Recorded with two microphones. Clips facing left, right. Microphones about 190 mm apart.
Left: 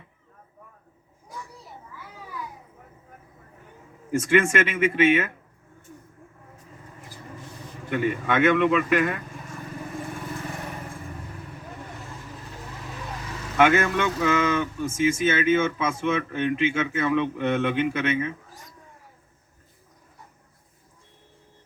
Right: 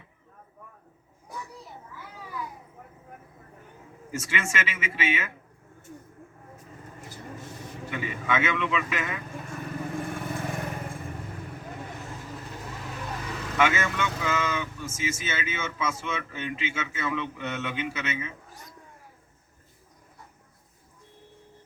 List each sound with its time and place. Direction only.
4.2 s speech: 55° left (ahead or behind)
7.9 s a man's voice: 55° left (ahead or behind)
13.6 s speech: 55° left (ahead or behind)